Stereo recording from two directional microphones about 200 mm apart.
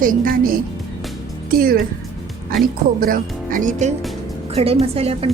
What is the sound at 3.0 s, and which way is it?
Speech, 45° right (ahead or behind).